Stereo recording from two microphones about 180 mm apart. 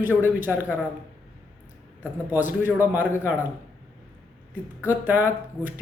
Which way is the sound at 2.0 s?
10° right (ahead or behind).